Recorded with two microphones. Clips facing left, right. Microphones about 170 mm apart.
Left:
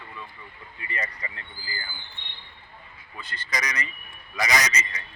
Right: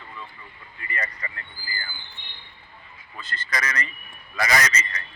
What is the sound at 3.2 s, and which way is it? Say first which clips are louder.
A man's voice: right 2 dB; 10° left (ahead or behind).